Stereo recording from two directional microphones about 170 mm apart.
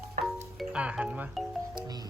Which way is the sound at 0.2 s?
60° right (ahead or behind).